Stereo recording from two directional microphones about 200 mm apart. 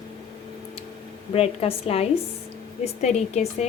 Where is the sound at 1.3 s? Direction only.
30° left (ahead or behind).